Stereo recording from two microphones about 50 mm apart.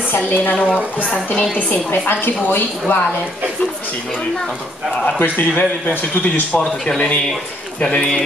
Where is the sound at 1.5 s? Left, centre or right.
Left.